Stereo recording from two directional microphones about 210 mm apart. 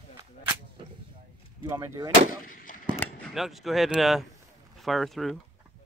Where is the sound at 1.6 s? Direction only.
15° right (ahead or behind).